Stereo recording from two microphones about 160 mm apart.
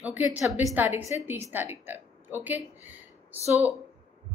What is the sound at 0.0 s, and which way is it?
A woman's voice, 10° right (ahead or behind).